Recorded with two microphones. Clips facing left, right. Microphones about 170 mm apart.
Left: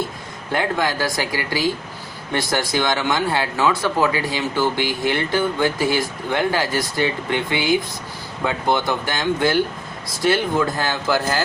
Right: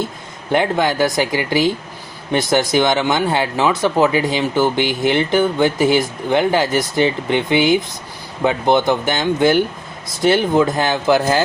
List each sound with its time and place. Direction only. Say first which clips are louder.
0.5 s speech: right 5 dB; 20° right (ahead or behind)